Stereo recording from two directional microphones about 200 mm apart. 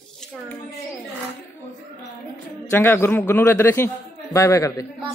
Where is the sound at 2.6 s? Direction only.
10° left (ahead or behind).